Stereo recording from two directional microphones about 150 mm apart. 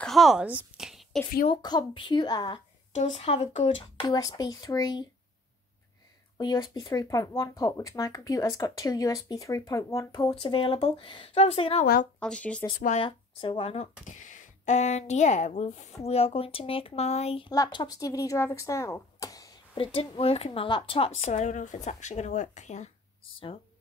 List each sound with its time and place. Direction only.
0.0 s a sound: centre (ahead or behind)
1.5 s speech: 30° left (ahead or behind)
2.9 s speech: 50° left (ahead or behind)
4.2 s speech: 25° left (ahead or behind)
6.3 s speech: 25° left (ahead or behind)
10.4 s speech: 35° left (ahead or behind)
12.2 s speech: 5° left (ahead or behind)
12.7 s speech: 55° left (ahead or behind)
13.0 s speech: 35° left (ahead or behind)
14.0 s a woman's voice: 60° left (ahead or behind); by 17.5 s 45° left (ahead or behind)
17.5 s speech: 30° left (ahead or behind)
19.7 s a woman's voice: 35° left (ahead or behind)
23.3 s speech: 35° left (ahead or behind)